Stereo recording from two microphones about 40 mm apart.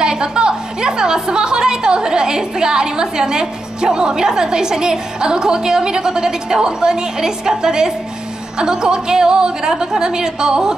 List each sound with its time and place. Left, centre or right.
0.0 s a woman's voice: right